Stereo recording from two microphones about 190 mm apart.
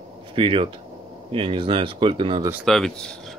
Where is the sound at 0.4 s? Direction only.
30° right (ahead or behind).